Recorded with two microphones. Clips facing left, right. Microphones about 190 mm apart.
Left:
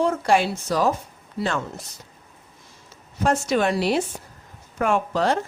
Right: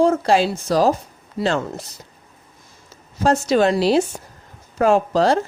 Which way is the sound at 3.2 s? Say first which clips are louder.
Right 5 dB; 35° right (ahead or behind).